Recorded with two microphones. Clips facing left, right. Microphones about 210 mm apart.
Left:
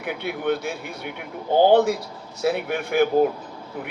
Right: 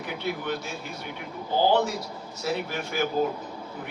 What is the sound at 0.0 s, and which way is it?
Speech, 60° left (ahead or behind).